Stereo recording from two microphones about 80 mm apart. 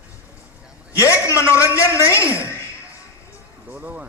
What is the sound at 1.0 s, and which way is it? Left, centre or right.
A man's voice, left.